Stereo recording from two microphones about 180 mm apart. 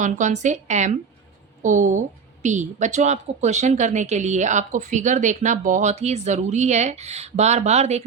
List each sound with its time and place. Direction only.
0.0 s a woman's voice: 40° right (ahead or behind)